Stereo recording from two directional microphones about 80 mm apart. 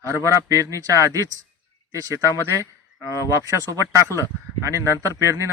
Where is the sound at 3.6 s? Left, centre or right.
Right.